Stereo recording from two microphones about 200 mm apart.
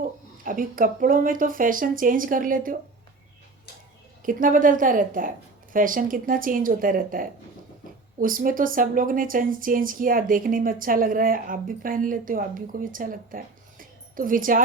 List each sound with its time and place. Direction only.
0.0 s speech: 45° right (ahead or behind)
4.2 s speech: 45° right (ahead or behind)